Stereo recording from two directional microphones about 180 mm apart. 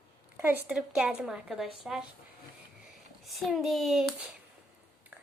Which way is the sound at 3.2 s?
Centre (ahead or behind).